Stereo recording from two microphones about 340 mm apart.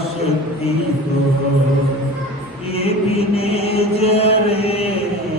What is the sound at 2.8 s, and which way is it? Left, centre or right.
Mantra, centre.